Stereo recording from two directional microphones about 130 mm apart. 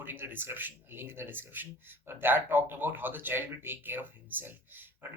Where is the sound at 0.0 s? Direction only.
15° right (ahead or behind).